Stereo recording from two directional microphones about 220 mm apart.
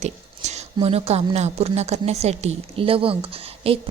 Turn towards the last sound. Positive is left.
turn(degrees=-25)  # may be behind; listen again after turning